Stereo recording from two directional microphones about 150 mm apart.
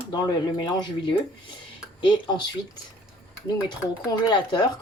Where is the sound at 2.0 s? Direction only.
30° left (ahead or behind).